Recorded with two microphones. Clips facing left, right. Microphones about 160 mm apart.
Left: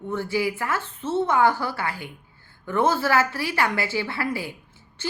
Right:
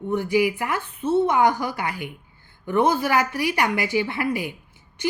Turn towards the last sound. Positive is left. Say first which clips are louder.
# right 6 dB
turn(degrees=-15)  # may be behind; listen again after turning